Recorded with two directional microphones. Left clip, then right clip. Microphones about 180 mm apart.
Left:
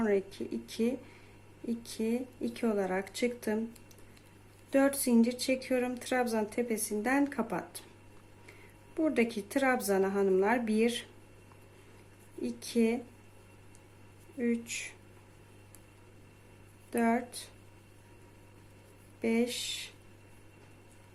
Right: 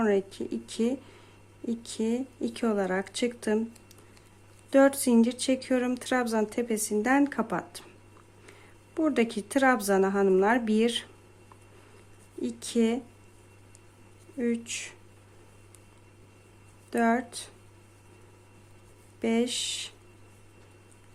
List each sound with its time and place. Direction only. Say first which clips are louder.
0.0 s speech: right 4 dB; 25° right (ahead or behind)
4.7 s speech: right 6 dB; 25° right (ahead or behind)
9.0 s speech: right 3 dB; 25° right (ahead or behind)
12.4 s speech: right 3 dB; 25° right (ahead or behind)
14.3 s speech: right 3 dB; 25° right (ahead or behind)
16.9 s speech: right 4 dB; 25° right (ahead or behind)
19.2 s speech: right 4 dB; 25° right (ahead or behind)